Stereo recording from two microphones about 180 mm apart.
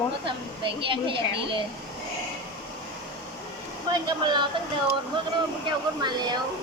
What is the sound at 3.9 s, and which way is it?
Speech, 25° right (ahead or behind).